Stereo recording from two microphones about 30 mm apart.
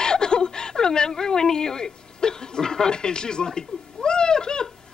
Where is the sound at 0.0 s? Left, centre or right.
Left.